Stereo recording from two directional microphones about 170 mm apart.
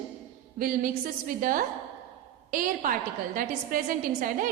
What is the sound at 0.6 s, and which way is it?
A woman's voice, 55° right (ahead or behind).